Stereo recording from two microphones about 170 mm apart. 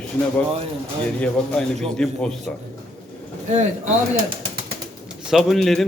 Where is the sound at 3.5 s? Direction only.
45° right (ahead or behind).